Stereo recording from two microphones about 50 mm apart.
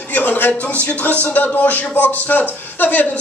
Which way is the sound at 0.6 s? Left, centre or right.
Left.